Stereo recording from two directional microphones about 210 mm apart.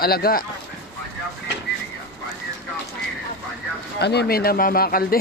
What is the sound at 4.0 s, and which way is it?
Speech, 50° left (ahead or behind).